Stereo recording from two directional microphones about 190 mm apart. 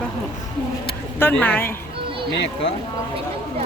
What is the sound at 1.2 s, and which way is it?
Speech, 10° left (ahead or behind).